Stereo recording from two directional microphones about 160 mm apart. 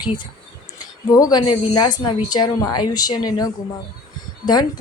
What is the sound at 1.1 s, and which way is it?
A woman's voice, 25° left (ahead or behind).